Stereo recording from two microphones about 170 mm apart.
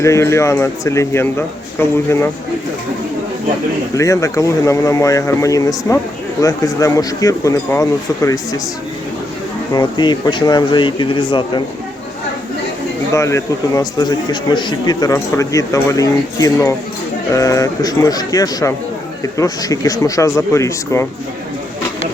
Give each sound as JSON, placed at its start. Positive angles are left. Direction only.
{"t": 0.0, "sound": "speech", "side_deg": 15}
{"t": 3.9, "sound": "a man's voice", "side_deg": 20}
{"t": 9.7, "sound": "a man's voice", "side_deg": 25}
{"t": 13.1, "sound": "a man's voice", "side_deg": 15}